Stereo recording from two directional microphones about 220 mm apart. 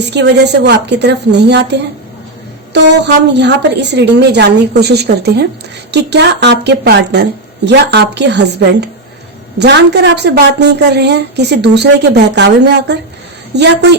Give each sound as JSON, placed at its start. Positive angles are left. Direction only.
{"t": 0.0, "sound": "a woman's voice", "side_deg": -50}